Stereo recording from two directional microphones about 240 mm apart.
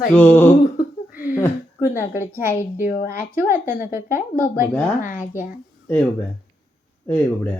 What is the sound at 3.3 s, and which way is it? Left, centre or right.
Speech, centre.